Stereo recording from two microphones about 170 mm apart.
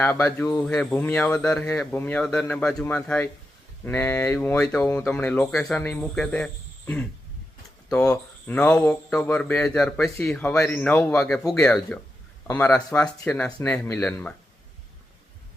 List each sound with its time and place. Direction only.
0.0 s a man's voice: 15° left (ahead or behind)
0.6 s a man's voice: 5° left (ahead or behind)